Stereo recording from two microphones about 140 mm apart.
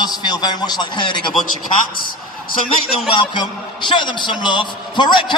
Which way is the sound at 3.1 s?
35° left (ahead or behind).